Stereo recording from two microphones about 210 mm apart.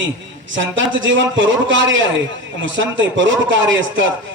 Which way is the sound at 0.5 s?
60° right (ahead or behind).